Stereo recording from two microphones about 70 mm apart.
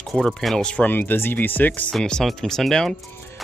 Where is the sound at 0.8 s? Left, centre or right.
Left.